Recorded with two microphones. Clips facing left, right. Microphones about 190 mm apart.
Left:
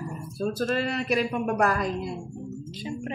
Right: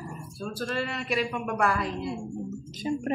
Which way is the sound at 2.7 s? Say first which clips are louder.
Right 6 dB; 45° right (ahead or behind).